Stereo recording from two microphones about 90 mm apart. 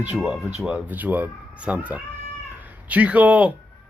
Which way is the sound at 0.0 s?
15° right (ahead or behind).